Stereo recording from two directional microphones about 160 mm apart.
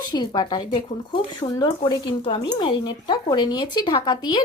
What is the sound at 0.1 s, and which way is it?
Speech, 25° left (ahead or behind).